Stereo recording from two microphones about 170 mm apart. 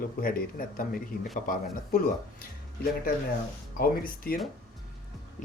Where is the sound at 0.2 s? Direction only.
60° left (ahead or behind).